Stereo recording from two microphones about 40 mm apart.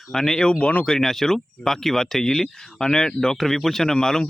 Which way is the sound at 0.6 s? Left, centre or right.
Left.